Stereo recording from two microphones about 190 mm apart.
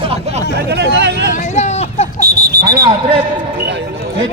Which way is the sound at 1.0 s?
65° right (ahead or behind).